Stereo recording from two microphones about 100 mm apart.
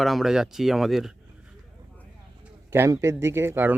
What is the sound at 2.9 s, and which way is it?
Speech, 30° right (ahead or behind).